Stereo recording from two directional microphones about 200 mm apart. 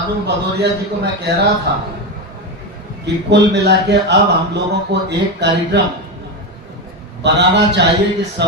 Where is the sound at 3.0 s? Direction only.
55° right (ahead or behind).